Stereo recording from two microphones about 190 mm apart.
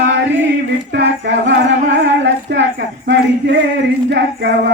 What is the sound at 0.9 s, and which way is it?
Female singing, 65° right (ahead or behind).